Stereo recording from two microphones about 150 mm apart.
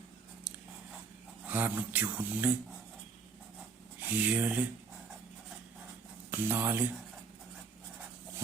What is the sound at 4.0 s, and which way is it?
Speech, 10° right (ahead or behind).